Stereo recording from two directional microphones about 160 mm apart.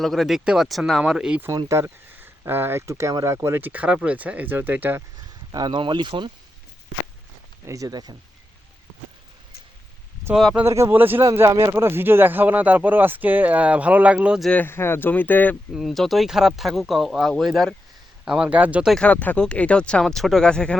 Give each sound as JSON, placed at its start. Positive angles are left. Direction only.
{"t": 0.0, "sound": "speech", "side_deg": 0}
{"t": 1.5, "sound": "speech", "side_deg": -20}
{"t": 5.5, "sound": "speech", "side_deg": -25}
{"t": 7.7, "sound": "speech", "side_deg": -20}
{"t": 10.3, "sound": "speech", "side_deg": 0}
{"t": 10.6, "sound": "speech", "side_deg": -15}
{"t": 14.5, "sound": "speech", "side_deg": 15}
{"t": 15.7, "sound": "speech", "side_deg": 0}
{"t": 18.9, "sound": "speech", "side_deg": 10}